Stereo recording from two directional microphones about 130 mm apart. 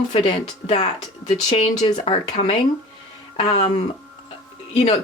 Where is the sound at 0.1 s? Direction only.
45° left (ahead or behind).